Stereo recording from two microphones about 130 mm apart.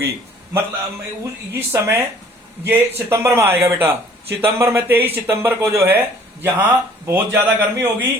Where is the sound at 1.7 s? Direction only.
20° right (ahead or behind).